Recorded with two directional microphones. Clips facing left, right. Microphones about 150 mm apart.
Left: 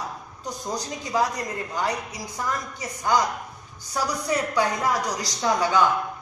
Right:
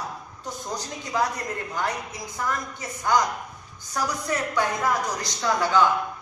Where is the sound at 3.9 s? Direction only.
15° left (ahead or behind).